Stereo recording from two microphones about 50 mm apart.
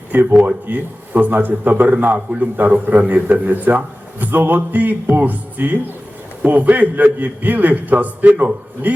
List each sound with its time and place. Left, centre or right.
0.1 s a man's voice: right